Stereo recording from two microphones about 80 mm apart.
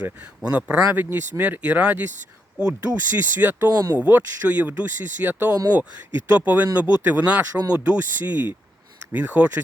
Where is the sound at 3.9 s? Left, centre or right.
Centre.